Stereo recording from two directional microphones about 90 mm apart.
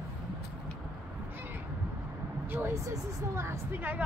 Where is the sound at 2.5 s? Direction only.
25° right (ahead or behind).